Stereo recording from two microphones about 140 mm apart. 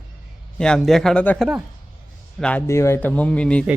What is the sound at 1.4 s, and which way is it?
Speech, 5° right (ahead or behind).